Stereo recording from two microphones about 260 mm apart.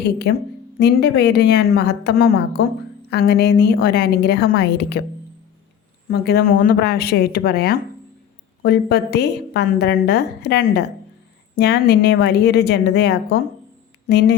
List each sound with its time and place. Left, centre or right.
0.3 s a woman's voice: left
6.1 s a woman's voice: left